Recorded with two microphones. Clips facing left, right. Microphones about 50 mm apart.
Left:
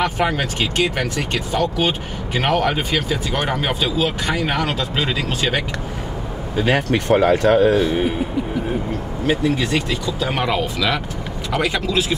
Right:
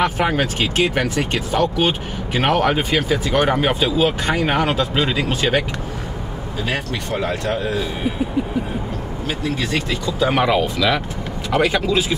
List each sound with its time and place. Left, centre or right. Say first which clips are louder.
0.0 s speech: right 1 dB; centre
4.4 s speech: right 3 dB; right
4.6 s speech: right 3 dB; centre
6.9 s speech: left 8 dB; left
10.1 s speech: right 6 dB; centre